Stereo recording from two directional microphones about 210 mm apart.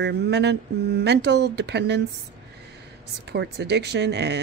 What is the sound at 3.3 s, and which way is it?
Speech, 55° right (ahead or behind).